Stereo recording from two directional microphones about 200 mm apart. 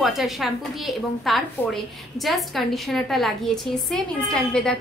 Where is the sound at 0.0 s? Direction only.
Centre (ahead or behind).